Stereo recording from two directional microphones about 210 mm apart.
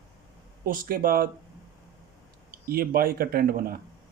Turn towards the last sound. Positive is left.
turn(degrees=-45)  # may be behind; listen again after turning